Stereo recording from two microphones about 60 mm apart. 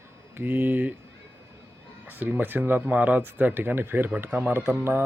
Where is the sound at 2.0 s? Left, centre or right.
Right.